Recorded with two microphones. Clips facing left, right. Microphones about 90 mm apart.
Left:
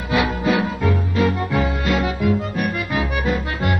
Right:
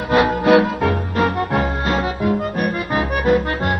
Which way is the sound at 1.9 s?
35° right (ahead or behind).